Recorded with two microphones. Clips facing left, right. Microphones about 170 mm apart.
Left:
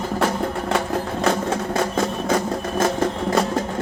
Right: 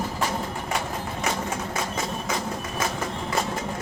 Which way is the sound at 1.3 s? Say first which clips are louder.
Left 7 dB; 60° left (ahead or behind).